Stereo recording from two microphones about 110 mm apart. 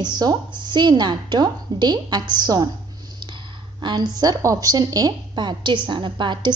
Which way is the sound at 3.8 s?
40° right (ahead or behind).